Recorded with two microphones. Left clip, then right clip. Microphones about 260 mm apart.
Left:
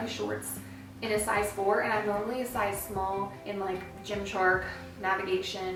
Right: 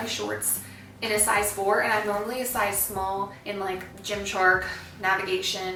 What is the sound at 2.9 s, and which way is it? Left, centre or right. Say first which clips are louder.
Speech: right 3 dB; left.